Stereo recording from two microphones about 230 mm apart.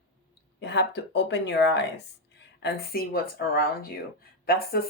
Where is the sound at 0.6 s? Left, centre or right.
Left.